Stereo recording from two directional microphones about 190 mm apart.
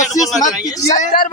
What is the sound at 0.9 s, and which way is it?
Speech, 40° left (ahead or behind).